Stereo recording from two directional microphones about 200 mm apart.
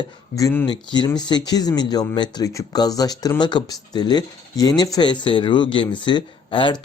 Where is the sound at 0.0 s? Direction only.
15° left (ahead or behind).